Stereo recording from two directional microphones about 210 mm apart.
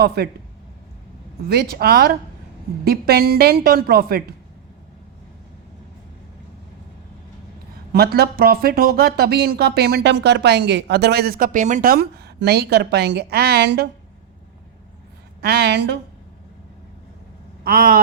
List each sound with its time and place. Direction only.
0.0 s speech: 50° right (ahead or behind)
1.5 s speech: 50° right (ahead or behind)
7.9 s speech: 50° right (ahead or behind)
15.4 s speech: 50° right (ahead or behind)
17.6 s vehicle: 45° right (ahead or behind)